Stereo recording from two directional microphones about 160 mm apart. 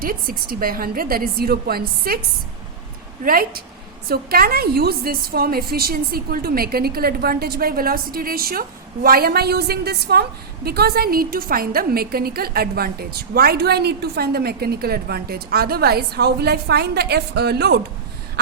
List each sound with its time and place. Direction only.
0.0 s a woman's voice: 65° right (ahead or behind)
3.2 s a woman's voice: 65° right (ahead or behind); by 17.7 s 90° right